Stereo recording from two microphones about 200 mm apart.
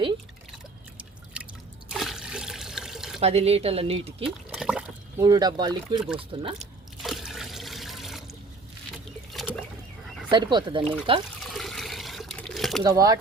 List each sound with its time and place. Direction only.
0.9 s drip: 5° right (ahead or behind)
1.9 s trickle: centre (ahead or behind)
3.2 s speech: 30° right (ahead or behind)
4.3 s liquid: 5° right (ahead or behind)
5.2 s speech: 20° right (ahead or behind)
6.6 s trickle: centre (ahead or behind)
9.3 s a sound: centre (ahead or behind)
10.2 s speech: 20° right (ahead or behind)
11.5 s water: centre (ahead or behind)
12.8 s speech: 20° right (ahead or behind)